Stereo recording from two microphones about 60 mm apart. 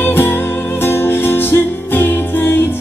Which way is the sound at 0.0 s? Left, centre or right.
Left.